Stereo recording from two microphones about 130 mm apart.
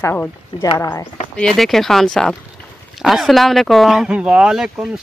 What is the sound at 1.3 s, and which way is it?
Speech, 5° left (ahead or behind).